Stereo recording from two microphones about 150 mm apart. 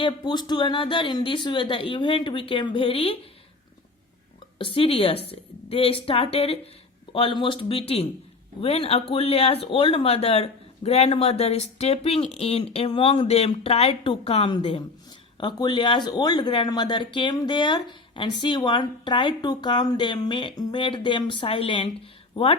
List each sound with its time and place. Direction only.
0.0 s speech: 30° left (ahead or behind)
4.5 s speech: 35° left (ahead or behind)